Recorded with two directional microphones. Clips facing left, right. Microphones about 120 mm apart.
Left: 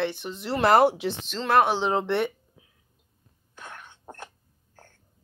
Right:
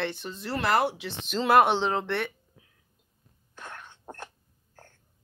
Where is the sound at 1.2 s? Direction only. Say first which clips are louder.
Right 1 dB; 5° right (ahead or behind).